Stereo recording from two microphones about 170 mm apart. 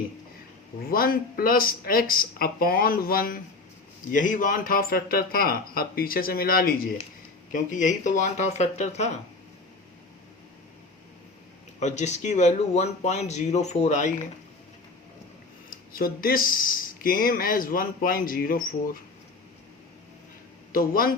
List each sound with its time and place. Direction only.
0.9 s speech: 60° left (ahead or behind)
7.5 s speech: 50° left (ahead or behind)
11.8 s speech: 45° left (ahead or behind)
15.9 s speech: 60° left (ahead or behind)
20.7 s speech: 60° left (ahead or behind)